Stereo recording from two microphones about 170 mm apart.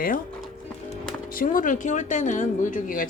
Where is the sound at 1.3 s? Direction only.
55° left (ahead or behind).